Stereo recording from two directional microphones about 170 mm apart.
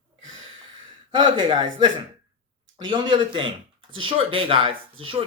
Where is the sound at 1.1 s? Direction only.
25° right (ahead or behind).